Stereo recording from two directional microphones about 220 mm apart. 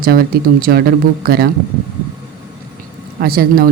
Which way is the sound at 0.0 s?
40° right (ahead or behind).